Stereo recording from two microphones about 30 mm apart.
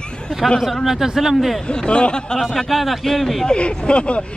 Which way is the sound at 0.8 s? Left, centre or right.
Centre.